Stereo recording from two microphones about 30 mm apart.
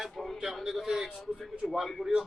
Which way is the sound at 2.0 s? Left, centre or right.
Right.